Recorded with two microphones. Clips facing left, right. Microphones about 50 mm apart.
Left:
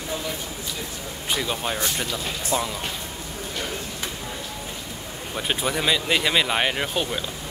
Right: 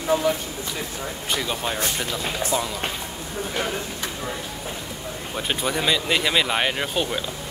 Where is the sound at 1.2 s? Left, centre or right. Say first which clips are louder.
Left 1 dB; centre.